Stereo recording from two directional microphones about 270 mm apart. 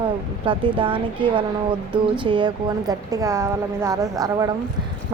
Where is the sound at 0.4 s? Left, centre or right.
Centre.